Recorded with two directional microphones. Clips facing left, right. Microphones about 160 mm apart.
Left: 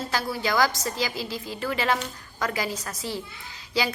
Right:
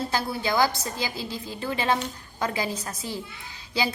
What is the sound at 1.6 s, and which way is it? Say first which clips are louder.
A woman's voice: right 1 dB; 25° right (ahead or behind).